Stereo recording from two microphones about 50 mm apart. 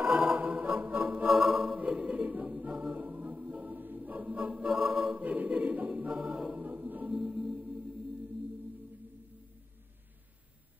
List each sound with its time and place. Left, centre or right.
0.0 s music: right
0.4 s organ: right
1.0 s music: right
1.3 s music: centre
1.8 s choir: right
2.6 s music: right
4.7 s a capella: right
6.6 s music: right
7.1 s music: centre